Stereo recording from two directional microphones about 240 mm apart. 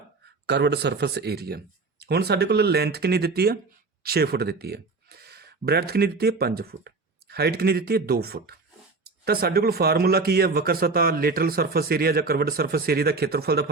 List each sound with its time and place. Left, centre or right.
0.4 s speech: right